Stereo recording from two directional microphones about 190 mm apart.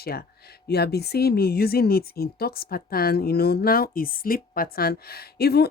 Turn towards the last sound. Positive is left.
turn(degrees=55)  # may be behind; listen again after turning